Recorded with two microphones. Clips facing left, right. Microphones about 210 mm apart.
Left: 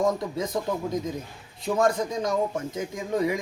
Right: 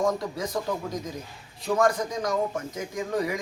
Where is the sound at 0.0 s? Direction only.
20° left (ahead or behind).